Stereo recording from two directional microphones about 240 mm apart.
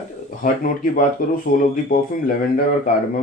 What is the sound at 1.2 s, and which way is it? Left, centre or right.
Speech, left.